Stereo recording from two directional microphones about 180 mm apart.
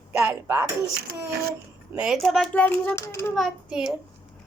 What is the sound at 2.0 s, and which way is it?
Speech, centre (ahead or behind).